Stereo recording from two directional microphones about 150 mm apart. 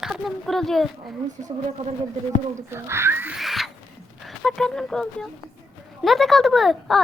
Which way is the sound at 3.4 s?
Centre (ahead or behind).